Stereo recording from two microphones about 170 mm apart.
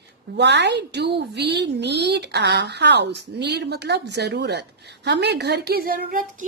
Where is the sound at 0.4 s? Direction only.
80° right.